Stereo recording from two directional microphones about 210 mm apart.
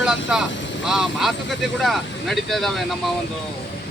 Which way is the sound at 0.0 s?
5° right (ahead or behind).